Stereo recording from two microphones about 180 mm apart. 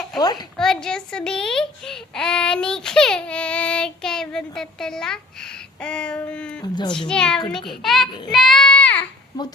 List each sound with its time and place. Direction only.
0.2 s a child's voice: 20° left (ahead or behind)
0.5 s a child's voice: 5° left (ahead or behind)
6.6 s a child's voice: 25° left (ahead or behind)
7.1 s a child's voice: 5° left (ahead or behind)
8.3 s child singing: centre (ahead or behind)